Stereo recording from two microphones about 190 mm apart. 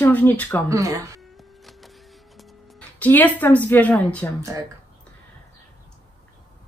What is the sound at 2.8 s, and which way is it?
Speech, 10° left (ahead or behind).